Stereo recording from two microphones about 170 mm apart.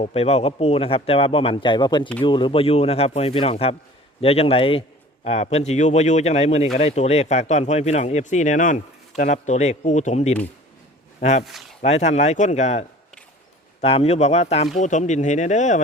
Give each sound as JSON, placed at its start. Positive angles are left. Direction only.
{"t": 0.0, "sound": "a man's voice", "side_deg": 35}
{"t": 11.4, "sound": "speech", "side_deg": 0}
{"t": 11.8, "sound": "a man's voice", "side_deg": 40}
{"t": 13.8, "sound": "a man's voice", "side_deg": 35}